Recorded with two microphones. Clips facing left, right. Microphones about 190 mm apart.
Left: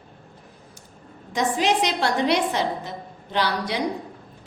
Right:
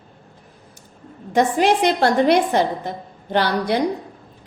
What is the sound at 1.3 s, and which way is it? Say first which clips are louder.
A woman's voice: right 5 dB; 55° right (ahead or behind).